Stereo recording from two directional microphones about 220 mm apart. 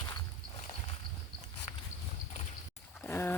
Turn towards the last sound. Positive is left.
turn(degrees=10)  # may be behind; listen again after turning